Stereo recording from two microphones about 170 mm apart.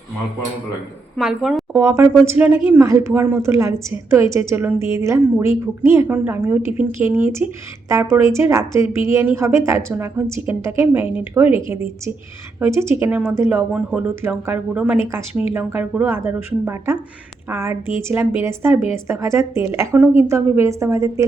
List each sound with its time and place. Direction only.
1.1 s a woman's voice: centre (ahead or behind)
1.7 s a woman's voice: 15° right (ahead or behind)